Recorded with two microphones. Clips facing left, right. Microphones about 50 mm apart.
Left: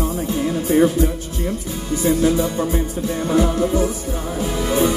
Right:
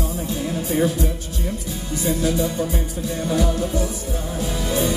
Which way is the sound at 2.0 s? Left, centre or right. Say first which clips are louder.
Left 4 dB; left.